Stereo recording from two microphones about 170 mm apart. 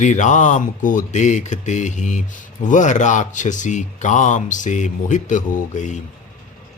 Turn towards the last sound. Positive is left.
turn(degrees=45)  # may be behind; listen again after turning